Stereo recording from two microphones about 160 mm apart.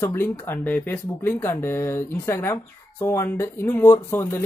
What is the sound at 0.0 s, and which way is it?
Speech, 15° left (ahead or behind).